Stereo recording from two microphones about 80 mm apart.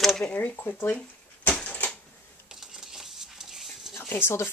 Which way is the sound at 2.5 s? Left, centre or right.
Centre.